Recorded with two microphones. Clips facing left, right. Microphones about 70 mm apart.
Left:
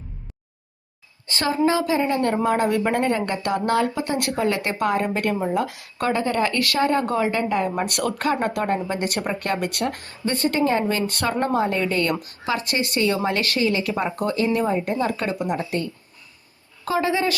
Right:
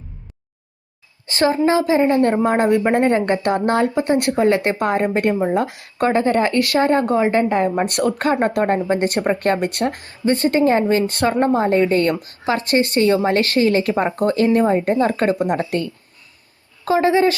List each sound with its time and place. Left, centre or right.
1.3 s a woman's voice: right
16.8 s speech: right